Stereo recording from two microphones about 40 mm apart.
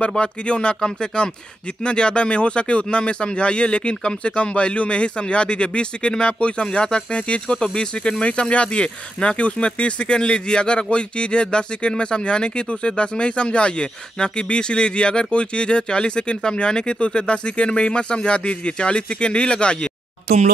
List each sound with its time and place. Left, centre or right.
0.1 s a man's voice: left